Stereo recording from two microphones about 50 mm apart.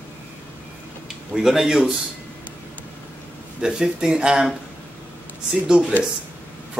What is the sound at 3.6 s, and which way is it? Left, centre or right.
Speech, centre.